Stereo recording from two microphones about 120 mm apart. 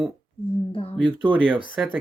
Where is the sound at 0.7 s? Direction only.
50° left (ahead or behind).